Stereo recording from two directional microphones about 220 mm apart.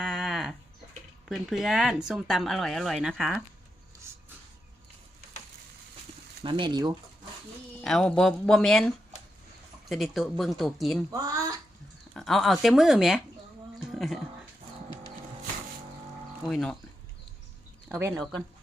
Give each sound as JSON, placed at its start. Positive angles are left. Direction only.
{"t": 0.0, "sound": "a sound", "side_deg": 0}
{"t": 1.3, "sound": "speech", "side_deg": 0}
{"t": 6.4, "sound": "speech", "side_deg": -20}
{"t": 7.8, "sound": "speech", "side_deg": 5}
{"t": 9.9, "sound": "speech", "side_deg": 0}
{"t": 11.1, "sound": "a sound", "side_deg": -15}
{"t": 12.1, "sound": "speech", "side_deg": 0}
{"t": 13.9, "sound": "a sound", "side_deg": 0}
{"t": 16.5, "sound": "speech", "side_deg": 5}
{"t": 17.8, "sound": "speech", "side_deg": -10}